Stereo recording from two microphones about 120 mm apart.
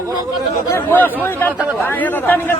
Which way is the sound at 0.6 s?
20° left (ahead or behind).